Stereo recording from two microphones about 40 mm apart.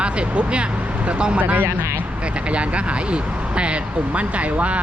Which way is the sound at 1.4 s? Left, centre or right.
Right.